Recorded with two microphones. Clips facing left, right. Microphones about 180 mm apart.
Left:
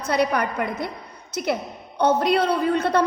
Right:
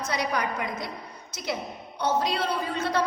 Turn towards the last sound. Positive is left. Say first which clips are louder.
# left 7 dB
turn(degrees=60)  # may be behind; listen again after turning